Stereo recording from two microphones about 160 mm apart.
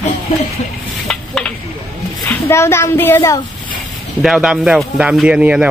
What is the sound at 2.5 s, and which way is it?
Speech, 15° left (ahead or behind).